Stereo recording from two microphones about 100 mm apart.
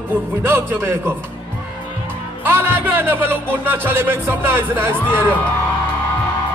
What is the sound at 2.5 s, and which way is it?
Speech, 25° right (ahead or behind).